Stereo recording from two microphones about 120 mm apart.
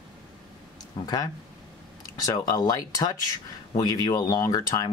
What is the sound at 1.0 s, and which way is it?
Speech, 30° left (ahead or behind).